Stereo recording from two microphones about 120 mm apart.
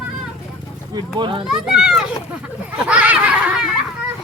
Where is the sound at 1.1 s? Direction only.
40° right (ahead or behind).